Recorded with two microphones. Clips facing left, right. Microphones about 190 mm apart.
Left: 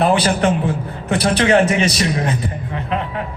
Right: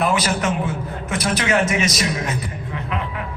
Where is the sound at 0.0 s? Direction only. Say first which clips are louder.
Left 5 dB; 30° left (ahead or behind).